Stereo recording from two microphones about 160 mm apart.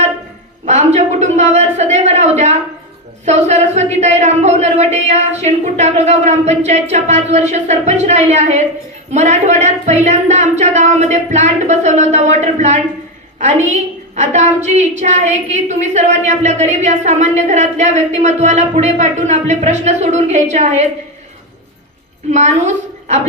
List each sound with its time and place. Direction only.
0.6 s a sound: 45° right (ahead or behind)
3.2 s a woman's voice: 45° right (ahead or behind)
22.3 s a woman's voice: 45° right (ahead or behind)